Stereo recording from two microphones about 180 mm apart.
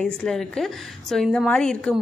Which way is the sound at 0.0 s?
5° left (ahead or behind).